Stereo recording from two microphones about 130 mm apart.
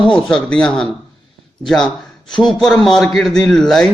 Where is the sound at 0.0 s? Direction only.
5° left (ahead or behind).